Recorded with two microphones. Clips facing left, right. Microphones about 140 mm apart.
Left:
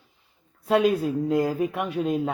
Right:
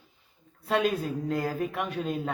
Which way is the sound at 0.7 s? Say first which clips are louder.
Left 6 dB; 10° left (ahead or behind).